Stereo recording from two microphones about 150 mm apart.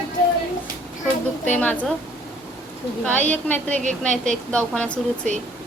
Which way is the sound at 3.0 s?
10° left (ahead or behind).